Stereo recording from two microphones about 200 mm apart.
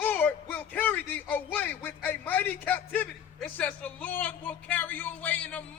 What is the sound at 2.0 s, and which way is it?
A man's voice, 10° left (ahead or behind).